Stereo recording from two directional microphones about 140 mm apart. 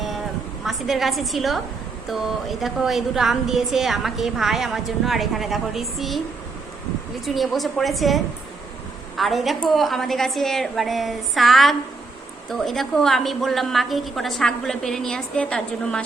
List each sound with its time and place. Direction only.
0.6 s a woman's voice: centre (ahead or behind)
7.3 s a woman's voice: centre (ahead or behind)